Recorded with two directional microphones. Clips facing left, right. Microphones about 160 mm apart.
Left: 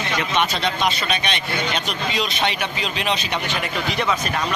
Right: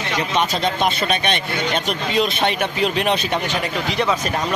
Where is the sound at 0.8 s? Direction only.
50° right (ahead or behind).